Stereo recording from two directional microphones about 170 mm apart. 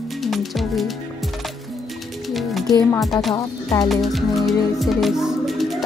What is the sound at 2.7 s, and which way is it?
Speech, 20° left (ahead or behind).